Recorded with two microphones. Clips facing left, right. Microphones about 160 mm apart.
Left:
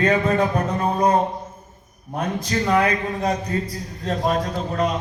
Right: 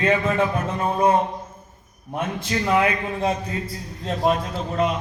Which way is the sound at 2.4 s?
40° left (ahead or behind).